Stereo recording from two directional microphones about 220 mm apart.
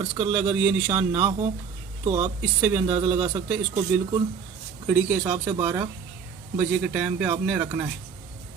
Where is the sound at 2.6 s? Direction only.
10° right (ahead or behind).